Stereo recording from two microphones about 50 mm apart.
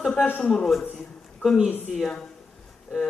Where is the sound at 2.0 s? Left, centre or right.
Left.